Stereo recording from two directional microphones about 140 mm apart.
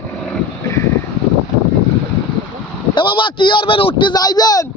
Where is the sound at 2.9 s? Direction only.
35° left (ahead or behind).